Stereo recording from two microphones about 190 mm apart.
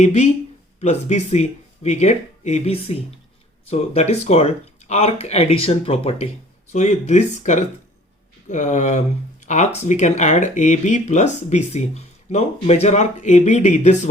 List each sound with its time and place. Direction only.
0.0 s speech: 35° left (ahead or behind)